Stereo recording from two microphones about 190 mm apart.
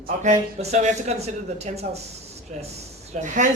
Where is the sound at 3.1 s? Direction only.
40° right (ahead or behind).